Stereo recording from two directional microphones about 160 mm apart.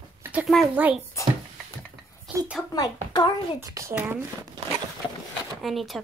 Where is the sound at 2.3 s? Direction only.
5° right (ahead or behind).